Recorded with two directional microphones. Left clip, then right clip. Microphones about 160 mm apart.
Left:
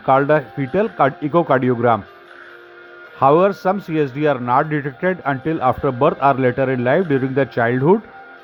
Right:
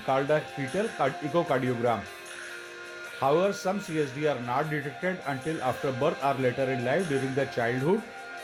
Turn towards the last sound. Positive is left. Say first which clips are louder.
# left 11 dB
turn(degrees=50)  # may be behind; listen again after turning